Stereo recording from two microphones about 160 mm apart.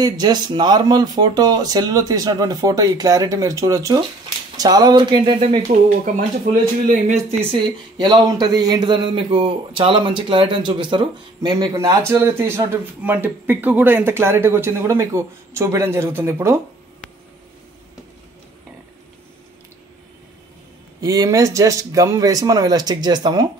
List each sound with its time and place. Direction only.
0.0 s speech: 25° right (ahead or behind)
5.7 s speech: 55° right (ahead or behind)
7.5 s a man's voice: 30° right (ahead or behind)
21.0 s speech: 20° right (ahead or behind)